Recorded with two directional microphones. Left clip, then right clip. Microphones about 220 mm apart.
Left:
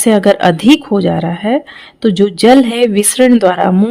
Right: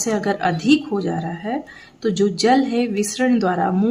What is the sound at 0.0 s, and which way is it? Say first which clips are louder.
Speech: left 11 dB; 45° left (ahead or behind).